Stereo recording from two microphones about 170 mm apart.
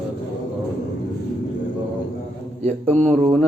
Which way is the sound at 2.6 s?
40° right (ahead or behind).